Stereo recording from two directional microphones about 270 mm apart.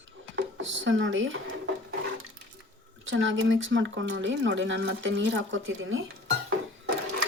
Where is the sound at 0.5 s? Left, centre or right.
Right.